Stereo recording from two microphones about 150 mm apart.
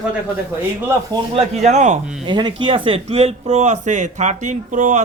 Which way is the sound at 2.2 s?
30° right (ahead or behind).